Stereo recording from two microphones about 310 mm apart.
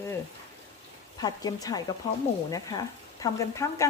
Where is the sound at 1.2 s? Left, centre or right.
Centre.